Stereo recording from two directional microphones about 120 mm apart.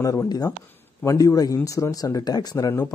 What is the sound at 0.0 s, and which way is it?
Speech, 30° left (ahead or behind).